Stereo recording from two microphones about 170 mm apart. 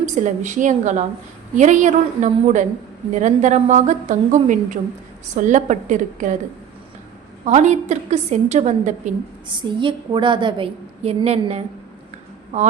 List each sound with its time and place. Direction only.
0.0 s a woman's voice: 45° right (ahead or behind)
7.4 s a woman's voice: 45° right (ahead or behind)
9.5 s a woman's voice: 30° right (ahead or behind)